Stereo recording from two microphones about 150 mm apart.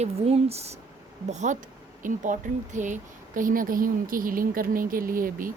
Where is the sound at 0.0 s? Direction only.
45° right (ahead or behind); by 5.5 s 70° right (ahead or behind).